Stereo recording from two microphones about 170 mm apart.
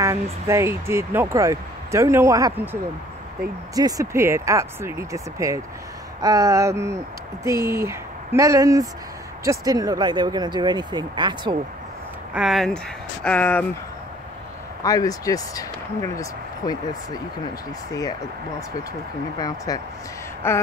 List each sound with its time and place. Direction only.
0.0 s speech: 15° right (ahead or behind)
12.4 s speech: centre (ahead or behind)
14.8 s speech: 20° left (ahead or behind)
19.3 s speech: 20° left (ahead or behind)
20.4 s a sound: 15° left (ahead or behind)